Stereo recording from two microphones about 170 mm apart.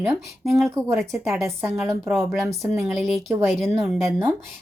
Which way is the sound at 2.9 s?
Centre (ahead or behind).